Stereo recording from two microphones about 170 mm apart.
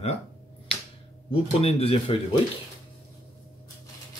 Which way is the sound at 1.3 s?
35° left (ahead or behind).